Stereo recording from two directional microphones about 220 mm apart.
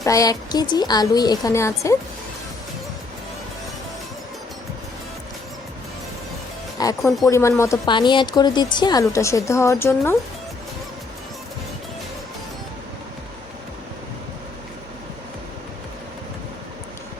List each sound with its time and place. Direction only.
0.0 s a woman's voice: 15° left (ahead or behind)
6.8 s a woman's voice: 15° left (ahead or behind)